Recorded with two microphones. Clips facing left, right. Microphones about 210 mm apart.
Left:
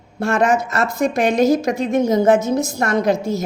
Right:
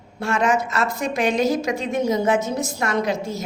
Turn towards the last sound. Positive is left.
turn(degrees=40)  # may be behind; listen again after turning